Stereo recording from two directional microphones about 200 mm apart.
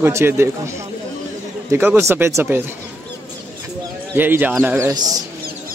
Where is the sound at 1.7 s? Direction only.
10° right (ahead or behind).